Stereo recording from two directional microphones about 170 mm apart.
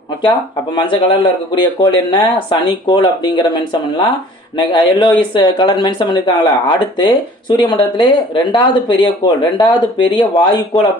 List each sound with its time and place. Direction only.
0.2 s speech: 30° left (ahead or behind)